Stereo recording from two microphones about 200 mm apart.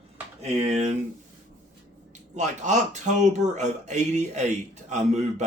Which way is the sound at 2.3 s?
35° right (ahead or behind).